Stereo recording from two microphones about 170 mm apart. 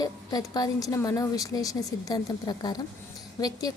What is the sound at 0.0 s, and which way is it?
Speech, 20° left (ahead or behind).